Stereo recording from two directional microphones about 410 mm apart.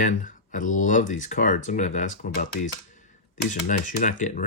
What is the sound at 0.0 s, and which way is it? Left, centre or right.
Speech, centre.